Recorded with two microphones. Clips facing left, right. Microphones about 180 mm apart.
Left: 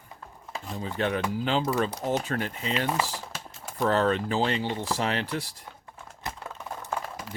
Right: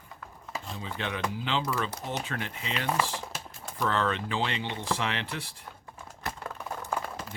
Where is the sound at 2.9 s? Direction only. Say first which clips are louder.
Even; 10° left (ahead or behind).